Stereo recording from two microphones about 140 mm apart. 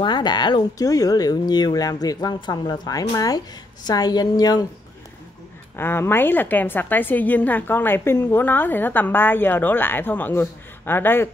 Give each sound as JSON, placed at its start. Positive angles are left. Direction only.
{"t": 0.0, "sound": "speech", "side_deg": 30}
{"t": 5.8, "sound": "a woman's voice", "side_deg": 15}